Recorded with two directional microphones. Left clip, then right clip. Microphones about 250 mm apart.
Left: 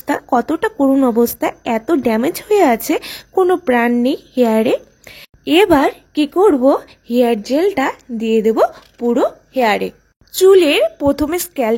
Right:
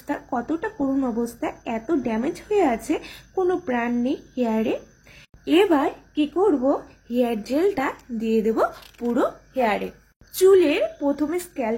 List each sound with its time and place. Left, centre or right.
0.0 s speech: left